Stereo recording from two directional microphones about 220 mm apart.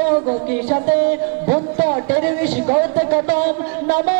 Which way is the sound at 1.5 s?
15° right (ahead or behind).